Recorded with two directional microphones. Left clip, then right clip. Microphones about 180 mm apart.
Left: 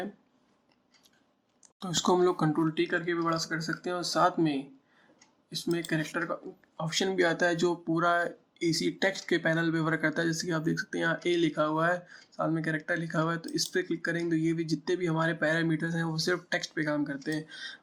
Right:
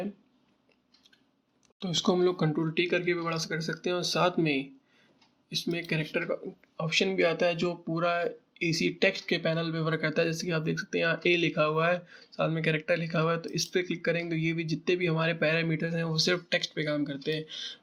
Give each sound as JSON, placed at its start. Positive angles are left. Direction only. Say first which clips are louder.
{"t": 1.8, "sound": "speech", "louder": "left 1 dB", "side_deg": -15}